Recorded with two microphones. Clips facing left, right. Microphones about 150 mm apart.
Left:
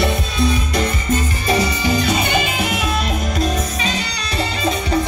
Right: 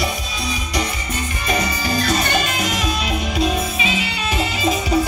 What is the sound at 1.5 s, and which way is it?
Music, 30° left (ahead or behind).